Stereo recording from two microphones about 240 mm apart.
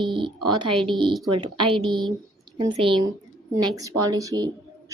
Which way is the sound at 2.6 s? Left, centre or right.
Centre.